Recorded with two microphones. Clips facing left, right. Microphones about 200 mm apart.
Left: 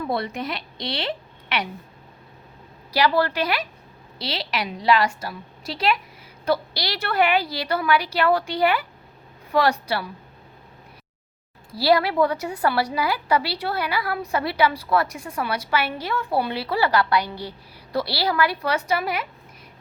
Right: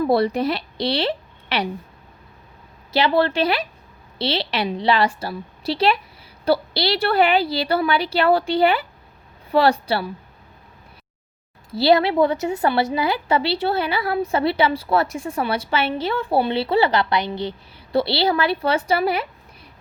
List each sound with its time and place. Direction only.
0.0 s a woman's voice: 35° right (ahead or behind)
2.9 s a woman's voice: 25° right (ahead or behind)
11.7 s a woman's voice: 25° right (ahead or behind)